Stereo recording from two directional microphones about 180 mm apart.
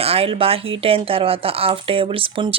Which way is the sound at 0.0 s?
35° right (ahead or behind).